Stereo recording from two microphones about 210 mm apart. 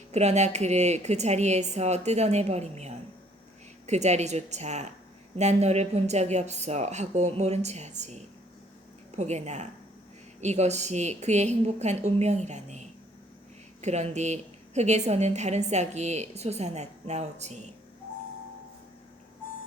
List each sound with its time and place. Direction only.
0.1 s a woman's voice: 30° right (ahead or behind)